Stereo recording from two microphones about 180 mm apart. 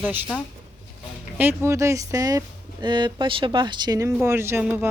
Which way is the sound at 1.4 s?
15° right (ahead or behind).